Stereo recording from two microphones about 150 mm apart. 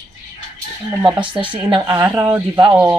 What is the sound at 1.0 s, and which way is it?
Speech, 10° right (ahead or behind).